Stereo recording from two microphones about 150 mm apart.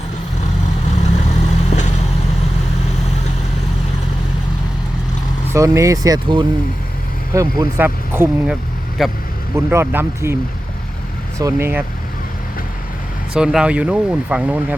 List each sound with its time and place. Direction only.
0.9 s vehicle: 50° left (ahead or behind)
5.5 s speech: 20° right (ahead or behind)
9.0 s speech: centre (ahead or behind)
9.6 s speech: 10° right (ahead or behind)
11.3 s speech: 20° right (ahead or behind)
13.3 s speech: 5° right (ahead or behind)